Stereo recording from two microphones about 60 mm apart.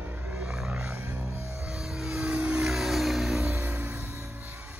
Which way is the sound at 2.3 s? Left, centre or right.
Right.